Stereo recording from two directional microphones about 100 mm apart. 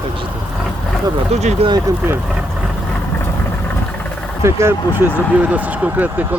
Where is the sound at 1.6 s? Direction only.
80° right.